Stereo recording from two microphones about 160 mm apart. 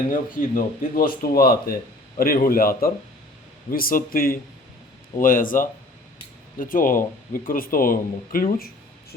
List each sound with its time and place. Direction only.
0.1 s speech: 60° left (ahead or behind)